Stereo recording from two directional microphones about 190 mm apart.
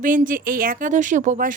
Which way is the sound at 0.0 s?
45° right (ahead or behind).